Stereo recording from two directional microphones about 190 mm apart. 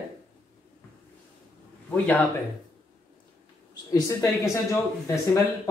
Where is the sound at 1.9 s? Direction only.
10° left (ahead or behind).